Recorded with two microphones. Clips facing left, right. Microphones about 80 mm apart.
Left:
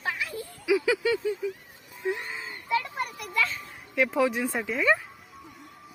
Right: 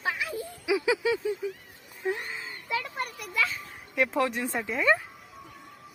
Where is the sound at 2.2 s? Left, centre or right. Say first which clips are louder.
Left 1 dB; centre.